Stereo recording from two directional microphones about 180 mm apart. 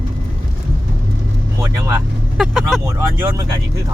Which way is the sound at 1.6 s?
20° right (ahead or behind).